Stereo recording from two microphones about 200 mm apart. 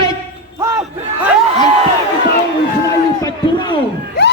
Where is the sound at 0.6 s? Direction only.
15° right (ahead or behind).